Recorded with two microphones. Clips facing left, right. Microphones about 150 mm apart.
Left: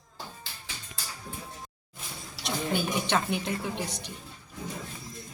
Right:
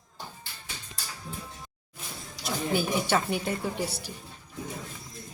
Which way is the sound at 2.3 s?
5° right (ahead or behind).